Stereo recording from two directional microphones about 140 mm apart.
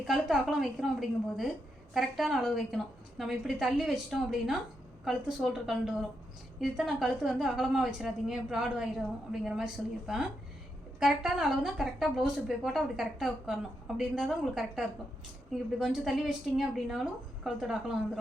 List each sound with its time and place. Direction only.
0.0 s a woman's voice: 5° right (ahead or behind)